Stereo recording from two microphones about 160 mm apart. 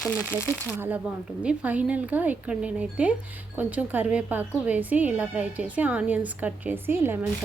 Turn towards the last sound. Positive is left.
turn(degrees=-15)  # may be behind; listen again after turning